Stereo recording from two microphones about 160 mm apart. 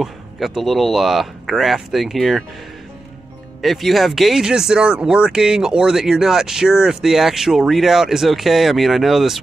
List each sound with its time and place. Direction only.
0.0 s speech: centre (ahead or behind)
3.6 s speech: centre (ahead or behind)